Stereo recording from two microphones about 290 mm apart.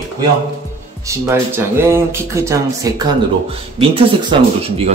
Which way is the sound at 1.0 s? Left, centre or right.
Centre.